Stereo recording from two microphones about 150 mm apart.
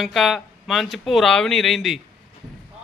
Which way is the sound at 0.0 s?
Centre (ahead or behind).